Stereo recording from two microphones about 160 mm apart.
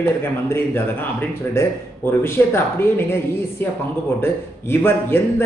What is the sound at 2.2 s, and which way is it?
Speech, 15° left (ahead or behind).